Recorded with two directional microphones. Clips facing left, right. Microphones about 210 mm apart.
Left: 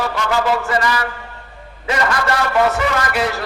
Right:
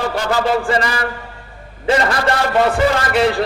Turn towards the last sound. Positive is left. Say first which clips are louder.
# right 4 dB
turn(degrees=-30)  # may be behind; listen again after turning